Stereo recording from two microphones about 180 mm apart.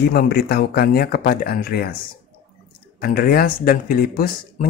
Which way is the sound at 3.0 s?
55° left (ahead or behind).